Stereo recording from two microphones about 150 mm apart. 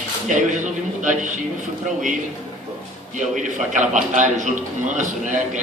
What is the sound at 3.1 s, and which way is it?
A man's voice, 55° right (ahead or behind).